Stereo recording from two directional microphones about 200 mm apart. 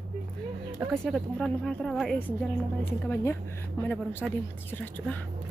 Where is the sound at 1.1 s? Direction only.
Centre (ahead or behind).